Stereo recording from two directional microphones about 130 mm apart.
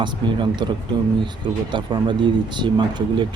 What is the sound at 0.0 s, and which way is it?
Speech, 35° right (ahead or behind).